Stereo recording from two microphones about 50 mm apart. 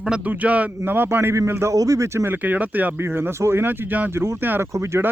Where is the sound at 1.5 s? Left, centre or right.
Right.